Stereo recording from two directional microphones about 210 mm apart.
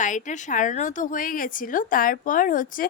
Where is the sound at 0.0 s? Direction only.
35° left (ahead or behind).